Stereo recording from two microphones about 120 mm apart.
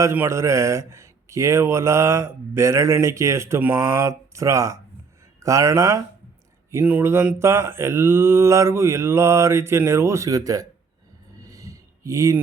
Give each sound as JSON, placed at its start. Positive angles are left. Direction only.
{"t": 0.0, "sound": "speech", "side_deg": -20}
{"t": 6.7, "sound": "speech", "side_deg": -15}
{"t": 11.4, "sound": "a sound", "side_deg": -30}